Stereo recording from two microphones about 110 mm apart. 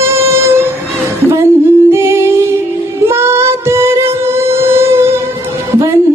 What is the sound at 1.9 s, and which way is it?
Humming, 25° right (ahead or behind).